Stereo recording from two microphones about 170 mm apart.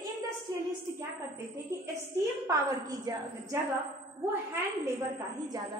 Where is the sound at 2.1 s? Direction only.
20° right (ahead or behind).